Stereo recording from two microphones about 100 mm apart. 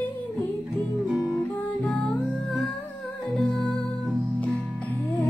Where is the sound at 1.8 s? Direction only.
15° left (ahead or behind).